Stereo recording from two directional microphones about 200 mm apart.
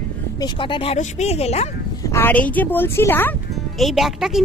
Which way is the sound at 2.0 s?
10° left (ahead or behind).